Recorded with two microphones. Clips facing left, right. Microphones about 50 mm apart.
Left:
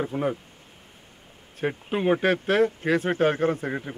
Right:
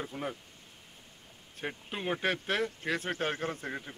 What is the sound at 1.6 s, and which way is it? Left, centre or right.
Speech, centre.